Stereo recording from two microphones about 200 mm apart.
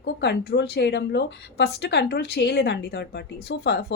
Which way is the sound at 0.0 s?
60° left (ahead or behind).